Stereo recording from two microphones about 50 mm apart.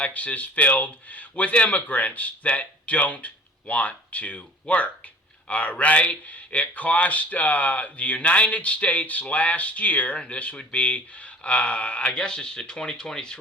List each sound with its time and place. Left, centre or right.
0.0 s speech: left